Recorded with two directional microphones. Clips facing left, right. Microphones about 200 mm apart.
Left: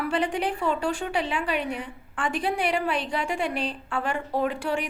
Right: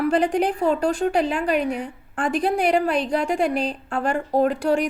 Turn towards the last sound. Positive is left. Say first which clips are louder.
# right 7 dB
turn(degrees=-40)  # may be behind; listen again after turning